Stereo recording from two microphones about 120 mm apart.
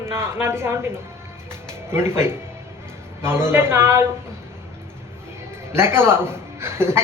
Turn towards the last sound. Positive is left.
turn(degrees=-20)  # may be behind; listen again after turning